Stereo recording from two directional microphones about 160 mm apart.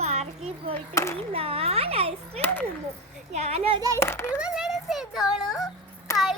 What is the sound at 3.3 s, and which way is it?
Speech, 40° right (ahead or behind).